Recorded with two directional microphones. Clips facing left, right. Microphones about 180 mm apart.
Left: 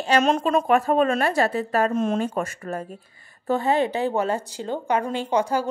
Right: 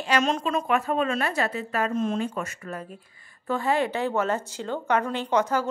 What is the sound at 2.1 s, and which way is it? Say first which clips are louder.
Speech: left 4 dB; 40° left (ahead or behind).